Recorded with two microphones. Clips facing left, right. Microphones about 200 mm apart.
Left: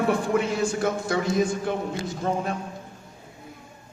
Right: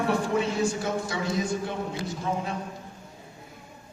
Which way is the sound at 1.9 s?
50° left (ahead or behind).